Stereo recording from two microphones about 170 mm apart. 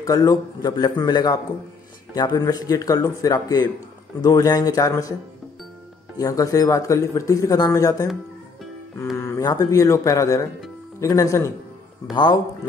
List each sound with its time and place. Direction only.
0.0 s speech: 20° left (ahead or behind)
6.1 s speech: 20° left (ahead or behind)
9.1 s speech: 15° left (ahead or behind)